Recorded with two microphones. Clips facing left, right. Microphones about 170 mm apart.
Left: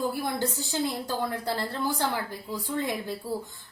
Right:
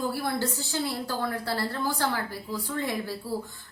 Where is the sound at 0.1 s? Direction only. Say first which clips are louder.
Even; 20° left (ahead or behind).